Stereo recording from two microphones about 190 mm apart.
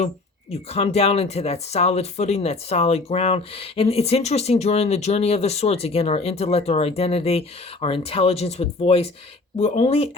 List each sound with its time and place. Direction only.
0.7 s speech: 35° left (ahead or behind)